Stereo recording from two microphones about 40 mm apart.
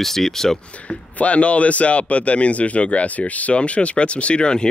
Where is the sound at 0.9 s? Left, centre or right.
Left.